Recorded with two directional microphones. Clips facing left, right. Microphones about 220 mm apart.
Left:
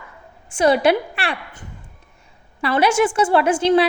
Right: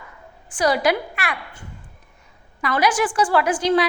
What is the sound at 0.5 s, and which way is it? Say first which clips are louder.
Speech: left 4 dB; 25° left (ahead or behind).